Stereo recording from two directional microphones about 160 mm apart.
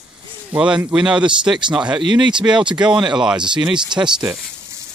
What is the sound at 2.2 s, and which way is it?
Speech, 30° right (ahead or behind).